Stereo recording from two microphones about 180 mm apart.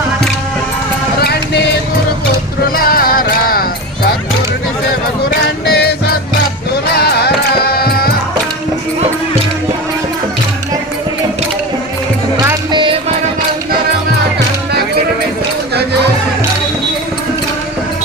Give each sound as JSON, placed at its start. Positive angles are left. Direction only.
{"t": 1.2, "sound": "a sound", "side_deg": 65}
{"t": 2.6, "sound": "music", "side_deg": 55}
{"t": 5.6, "sound": "music", "side_deg": 60}
{"t": 6.9, "sound": "music", "side_deg": 60}
{"t": 12.7, "sound": "music", "side_deg": -30}